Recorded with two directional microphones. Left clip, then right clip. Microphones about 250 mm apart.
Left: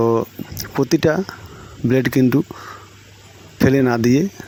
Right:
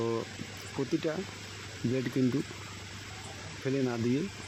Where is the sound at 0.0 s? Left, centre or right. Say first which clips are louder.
Left 16 dB; left.